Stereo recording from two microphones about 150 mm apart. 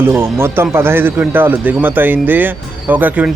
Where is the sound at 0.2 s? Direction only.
15° right (ahead or behind).